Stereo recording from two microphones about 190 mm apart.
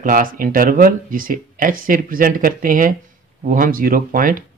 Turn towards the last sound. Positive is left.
turn(degrees=-45)  # may be behind; listen again after turning